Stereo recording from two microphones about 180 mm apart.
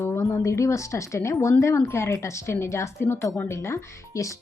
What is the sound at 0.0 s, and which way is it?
Speech, 15° left (ahead or behind).